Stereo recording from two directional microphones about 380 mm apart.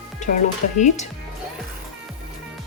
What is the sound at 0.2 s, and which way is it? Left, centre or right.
Speech, centre.